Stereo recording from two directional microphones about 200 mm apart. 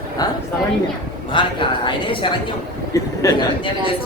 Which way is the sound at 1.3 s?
25° left (ahead or behind).